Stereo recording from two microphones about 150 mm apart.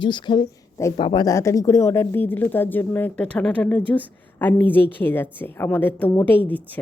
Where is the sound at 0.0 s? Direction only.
30° left (ahead or behind).